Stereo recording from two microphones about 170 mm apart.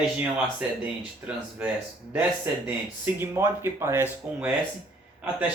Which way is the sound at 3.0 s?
15° right (ahead or behind).